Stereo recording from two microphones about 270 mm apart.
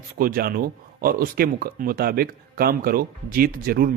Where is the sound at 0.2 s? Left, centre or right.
Right.